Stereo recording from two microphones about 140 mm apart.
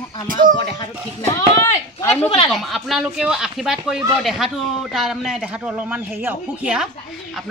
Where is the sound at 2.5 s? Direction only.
Centre (ahead or behind).